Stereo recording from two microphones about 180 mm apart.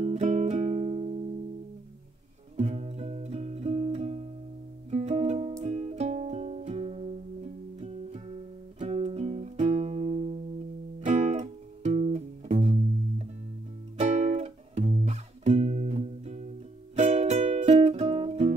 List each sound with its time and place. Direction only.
0.0 s music: 40° right (ahead or behind)
2.5 s music: 40° right (ahead or behind)
13.9 s music: 40° right (ahead or behind)